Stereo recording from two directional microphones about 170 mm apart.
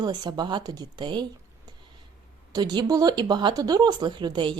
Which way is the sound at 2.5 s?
25° right (ahead or behind).